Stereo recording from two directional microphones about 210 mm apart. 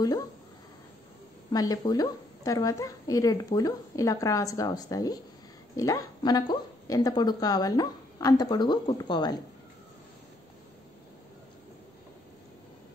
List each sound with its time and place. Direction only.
1.5 s a woman's voice: 20° left (ahead or behind)